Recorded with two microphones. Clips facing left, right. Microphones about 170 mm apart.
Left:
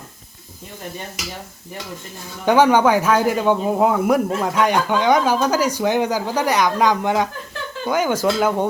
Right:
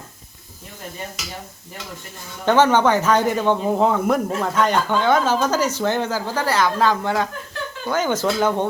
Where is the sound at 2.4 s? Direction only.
10° left (ahead or behind).